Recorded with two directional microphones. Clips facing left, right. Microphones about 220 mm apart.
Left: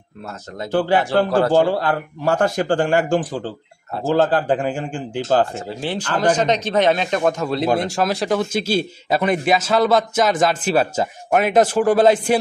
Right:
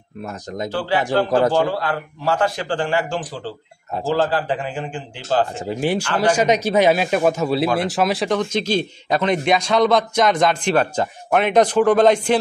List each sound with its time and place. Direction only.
0.7 s a man's voice: 50° left (ahead or behind)
5.6 s speech: 15° right (ahead or behind); by 12.4 s 5° left (ahead or behind)